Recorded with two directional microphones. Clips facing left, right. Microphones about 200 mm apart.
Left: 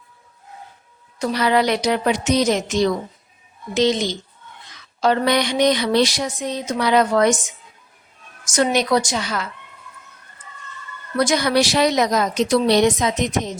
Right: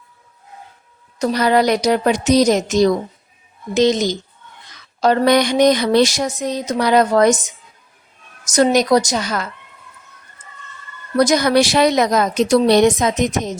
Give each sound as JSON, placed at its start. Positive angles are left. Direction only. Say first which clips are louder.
{"t": 1.2, "sound": "a woman's voice", "louder": "right 3 dB", "side_deg": -40}
{"t": 11.2, "sound": "speech", "louder": "right 4 dB", "side_deg": -40}